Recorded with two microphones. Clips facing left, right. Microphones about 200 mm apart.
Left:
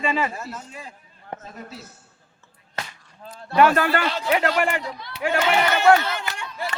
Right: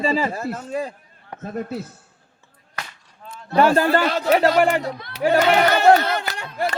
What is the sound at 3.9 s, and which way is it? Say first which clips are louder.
Speech: right 5 dB; 40° right (ahead or behind).